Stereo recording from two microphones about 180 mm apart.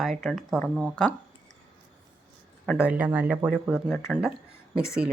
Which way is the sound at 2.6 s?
5° right (ahead or behind).